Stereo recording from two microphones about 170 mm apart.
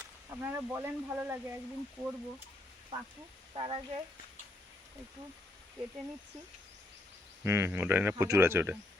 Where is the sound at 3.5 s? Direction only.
30° right (ahead or behind).